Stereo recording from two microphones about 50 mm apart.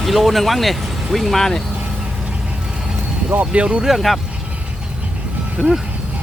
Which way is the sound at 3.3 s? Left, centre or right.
Right.